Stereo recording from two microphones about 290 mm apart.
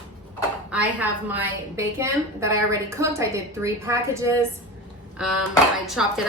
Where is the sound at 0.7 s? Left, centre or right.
Centre.